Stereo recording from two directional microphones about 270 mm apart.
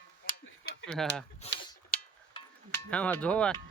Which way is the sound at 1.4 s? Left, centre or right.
Left.